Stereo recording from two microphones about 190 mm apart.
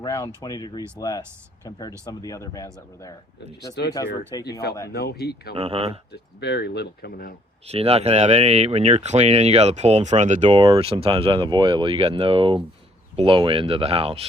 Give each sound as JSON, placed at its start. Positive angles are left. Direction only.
{"t": 0.0, "sound": "speech", "side_deg": 15}
{"t": 2.2, "sound": "speech", "side_deg": 15}
{"t": 3.8, "sound": "speech", "side_deg": 60}
{"t": 4.3, "sound": "speech", "side_deg": 20}
{"t": 4.9, "sound": "speech", "side_deg": 55}
{"t": 5.5, "sound": "speech", "side_deg": -30}
{"t": 6.4, "sound": "speech", "side_deg": 60}
{"t": 7.7, "sound": "speech", "side_deg": -30}